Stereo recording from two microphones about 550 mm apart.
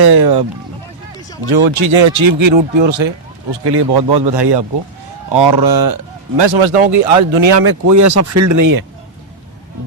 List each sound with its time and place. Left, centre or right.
0.1 s speech: right
1.6 s speech: right
7.4 s speech: right